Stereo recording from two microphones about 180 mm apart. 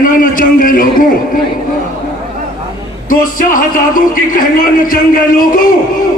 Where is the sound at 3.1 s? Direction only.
50° left (ahead or behind).